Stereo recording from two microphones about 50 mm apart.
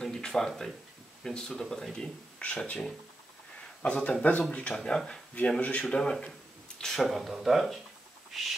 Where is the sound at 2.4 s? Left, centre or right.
Left.